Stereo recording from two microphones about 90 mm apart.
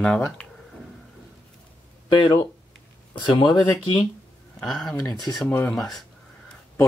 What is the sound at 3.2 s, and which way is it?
Speech, 60° left (ahead or behind).